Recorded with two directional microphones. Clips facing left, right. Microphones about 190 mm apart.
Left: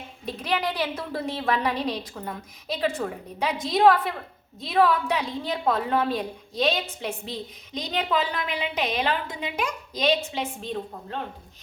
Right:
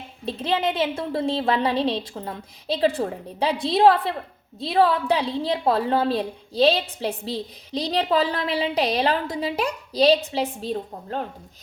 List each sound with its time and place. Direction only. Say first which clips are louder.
0.3 s a woman's voice: right 4 dB; 25° right (ahead or behind)